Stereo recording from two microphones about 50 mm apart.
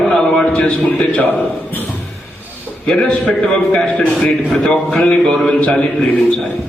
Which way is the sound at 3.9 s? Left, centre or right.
Left.